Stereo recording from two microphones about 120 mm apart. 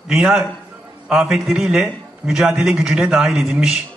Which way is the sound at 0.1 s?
5° right (ahead or behind).